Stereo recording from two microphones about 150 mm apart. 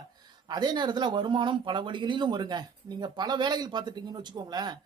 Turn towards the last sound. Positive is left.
turn(degrees=-30)  # may be behind; listen again after turning